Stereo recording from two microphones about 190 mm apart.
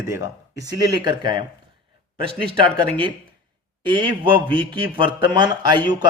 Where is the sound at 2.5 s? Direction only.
25° right (ahead or behind).